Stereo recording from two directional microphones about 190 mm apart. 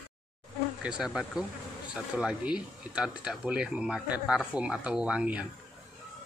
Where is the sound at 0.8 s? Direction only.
5° right (ahead or behind).